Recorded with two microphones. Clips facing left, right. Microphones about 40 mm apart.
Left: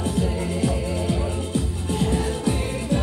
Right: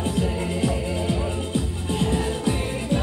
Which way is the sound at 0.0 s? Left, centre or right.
Right.